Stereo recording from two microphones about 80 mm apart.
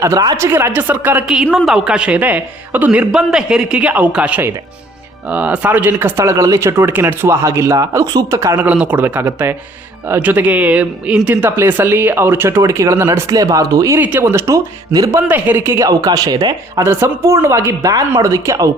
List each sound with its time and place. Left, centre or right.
0.3 s speech: right
0.7 s speech: right
1.5 s a man's voice: centre
3.2 s a man's voice: centre; by 8.5 s right
8.5 s speech: centre
13.2 s speech: right
14.0 s speech: right
15.3 s speech: right
15.8 s speech: right
16.7 s speech: right